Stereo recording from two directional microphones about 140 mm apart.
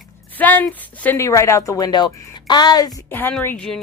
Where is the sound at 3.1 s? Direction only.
15° left (ahead or behind).